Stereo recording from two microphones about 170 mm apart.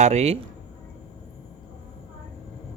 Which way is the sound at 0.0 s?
40° right (ahead or behind).